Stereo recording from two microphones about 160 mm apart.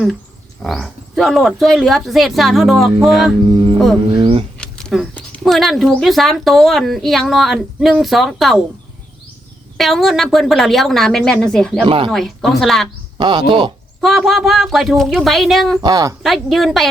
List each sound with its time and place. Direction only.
0.6 s speech: centre (ahead or behind)
4.2 s speech: 35° right (ahead or behind)
4.5 s speech: 5° left (ahead or behind)
9.7 s speech: centre (ahead or behind)
11.9 s speech: 35° right (ahead or behind)
12.1 s speech: centre (ahead or behind)
13.1 s speech: 30° right (ahead or behind)
14.0 s speech: centre (ahead or behind)
15.8 s speech: 20° right (ahead or behind)
16.2 s speech: centre (ahead or behind)